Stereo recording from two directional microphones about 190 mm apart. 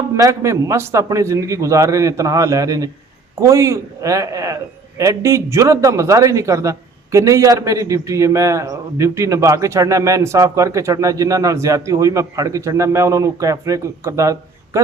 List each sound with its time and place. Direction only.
0.2 s a man's voice: 15° right (ahead or behind)